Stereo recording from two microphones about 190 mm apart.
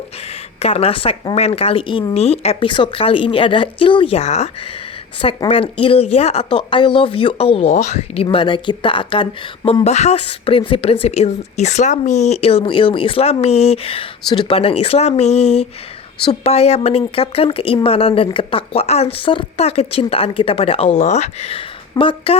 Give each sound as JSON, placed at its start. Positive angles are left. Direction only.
{"t": 0.6, "sound": "a woman's voice", "side_deg": 30}